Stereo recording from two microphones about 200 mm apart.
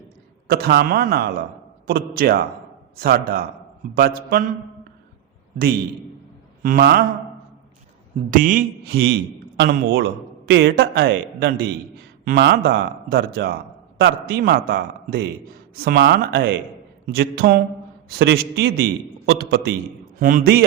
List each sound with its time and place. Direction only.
0.4 s a man's voice: 50° right (ahead or behind)
6.6 s mantra: 45° right (ahead or behind)
8.3 s a man's voice: 45° right (ahead or behind)